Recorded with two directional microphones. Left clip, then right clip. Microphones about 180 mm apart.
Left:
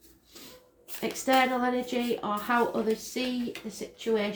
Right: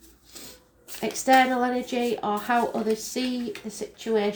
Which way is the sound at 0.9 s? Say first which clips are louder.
Right 5 dB; 40° right (ahead or behind).